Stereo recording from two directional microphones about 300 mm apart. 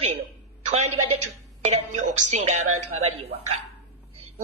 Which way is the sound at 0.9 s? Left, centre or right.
Right.